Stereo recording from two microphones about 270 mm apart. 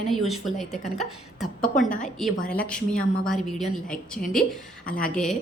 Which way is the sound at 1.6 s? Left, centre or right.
Left.